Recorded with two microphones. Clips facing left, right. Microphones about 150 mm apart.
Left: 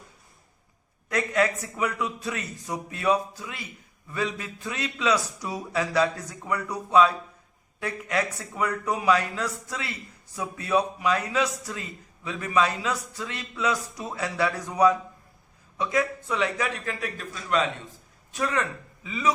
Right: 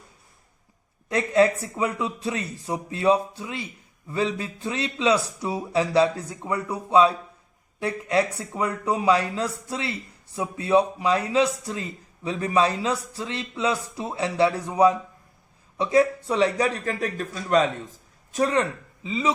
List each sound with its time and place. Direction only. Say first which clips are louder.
1.0 s a man's voice: right 5 dB; 30° right (ahead or behind)